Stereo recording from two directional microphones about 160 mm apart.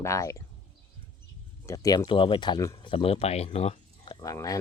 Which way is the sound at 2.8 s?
35° left (ahead or behind).